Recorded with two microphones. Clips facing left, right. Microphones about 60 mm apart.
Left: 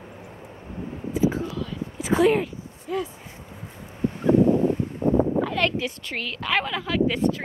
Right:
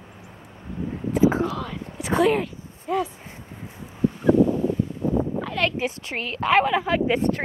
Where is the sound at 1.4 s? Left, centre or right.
Right.